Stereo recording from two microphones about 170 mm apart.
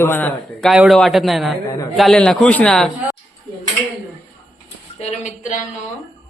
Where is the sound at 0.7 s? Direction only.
Centre (ahead or behind).